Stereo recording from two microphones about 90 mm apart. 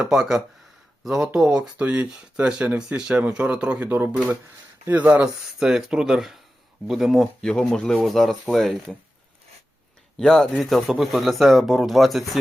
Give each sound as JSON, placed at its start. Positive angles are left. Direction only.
{"t": 0.1, "sound": "speech", "side_deg": -5}
{"t": 5.5, "sound": "speech", "side_deg": -5}
{"t": 7.4, "sound": "speech", "side_deg": 5}
{"t": 10.2, "sound": "speech", "side_deg": 5}